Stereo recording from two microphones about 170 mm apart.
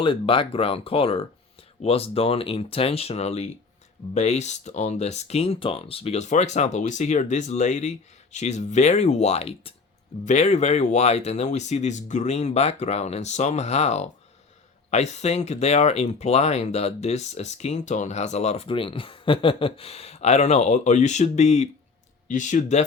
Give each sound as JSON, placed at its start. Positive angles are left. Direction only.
{"t": 0.0, "sound": "speech", "side_deg": 30}